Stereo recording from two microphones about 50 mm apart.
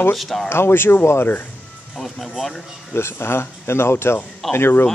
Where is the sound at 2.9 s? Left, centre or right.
Left.